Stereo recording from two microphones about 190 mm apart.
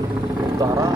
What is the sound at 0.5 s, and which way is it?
Speech, 20° right (ahead or behind).